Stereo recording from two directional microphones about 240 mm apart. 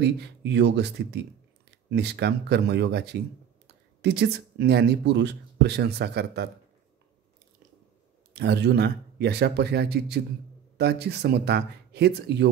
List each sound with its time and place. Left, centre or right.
0.0 s speech: right
8.3 s speech: right